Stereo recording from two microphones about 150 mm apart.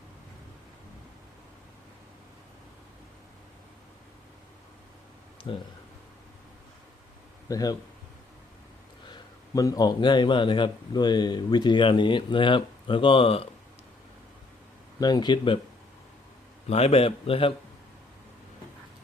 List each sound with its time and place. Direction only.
5.5 s a man's voice: 30° left (ahead or behind)
7.4 s speech: 25° left (ahead or behind)
9.1 s a man's voice: 25° left (ahead or behind)
15.0 s speech: 30° left (ahead or behind)
16.6 s a man's voice: 45° left (ahead or behind)